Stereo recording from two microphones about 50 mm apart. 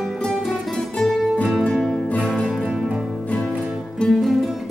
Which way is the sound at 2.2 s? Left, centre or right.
Centre.